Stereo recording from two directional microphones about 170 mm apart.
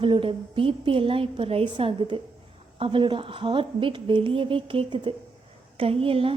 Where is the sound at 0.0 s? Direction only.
30° right (ahead or behind).